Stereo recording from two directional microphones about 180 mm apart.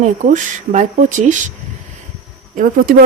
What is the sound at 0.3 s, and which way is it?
A woman's voice, 45° right (ahead or behind).